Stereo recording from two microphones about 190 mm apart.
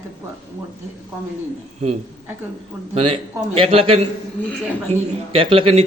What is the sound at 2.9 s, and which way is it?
A man's voice, 30° right (ahead or behind).